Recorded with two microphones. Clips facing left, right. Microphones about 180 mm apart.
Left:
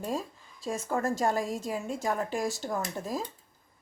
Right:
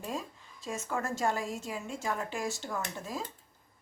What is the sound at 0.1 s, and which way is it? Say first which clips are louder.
A woman's voice: left 4 dB; 35° left (ahead or behind).